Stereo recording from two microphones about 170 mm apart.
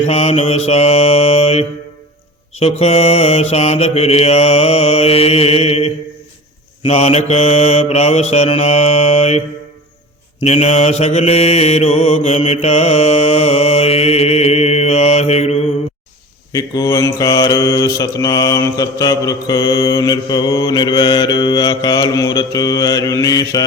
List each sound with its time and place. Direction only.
0.0 s mantra: 35° left (ahead or behind)
10.4 s mantra: 40° left (ahead or behind)
16.5 s mantra: 20° left (ahead or behind)